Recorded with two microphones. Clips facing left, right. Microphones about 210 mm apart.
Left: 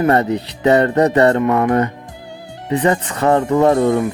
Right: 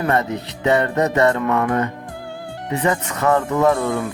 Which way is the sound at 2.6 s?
35° left (ahead or behind).